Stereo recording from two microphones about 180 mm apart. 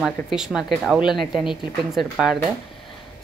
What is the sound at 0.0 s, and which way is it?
Speech, centre (ahead or behind).